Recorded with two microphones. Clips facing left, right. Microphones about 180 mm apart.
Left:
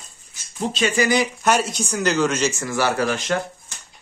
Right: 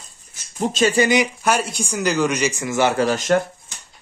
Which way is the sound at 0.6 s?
45° right (ahead or behind).